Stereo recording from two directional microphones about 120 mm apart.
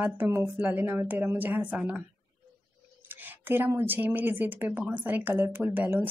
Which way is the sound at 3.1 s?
15° right (ahead or behind).